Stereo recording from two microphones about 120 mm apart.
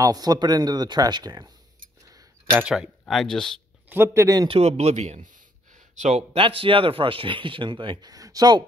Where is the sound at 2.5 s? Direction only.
10° right (ahead or behind).